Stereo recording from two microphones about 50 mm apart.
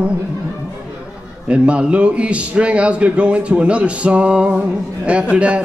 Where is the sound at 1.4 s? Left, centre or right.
Right.